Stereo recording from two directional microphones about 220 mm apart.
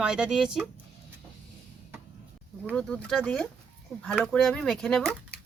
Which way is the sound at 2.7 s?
5° left (ahead or behind).